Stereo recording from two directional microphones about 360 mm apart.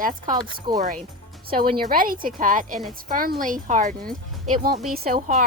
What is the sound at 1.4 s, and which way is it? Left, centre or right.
Speech, right.